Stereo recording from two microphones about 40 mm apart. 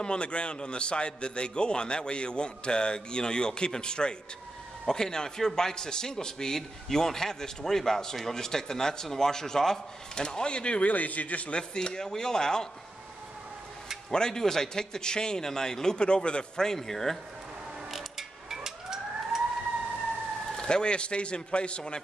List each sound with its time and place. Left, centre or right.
0.0 s a man's voice: left
14.1 s speech: centre
17.9 s emergency vehicle: centre
20.5 s a man's voice: left